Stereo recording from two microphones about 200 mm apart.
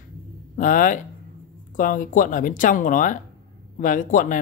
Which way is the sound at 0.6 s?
40° left (ahead or behind).